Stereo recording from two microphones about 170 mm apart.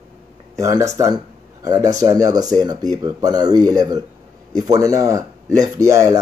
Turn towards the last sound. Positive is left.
turn(degrees=-20)  # may be behind; listen again after turning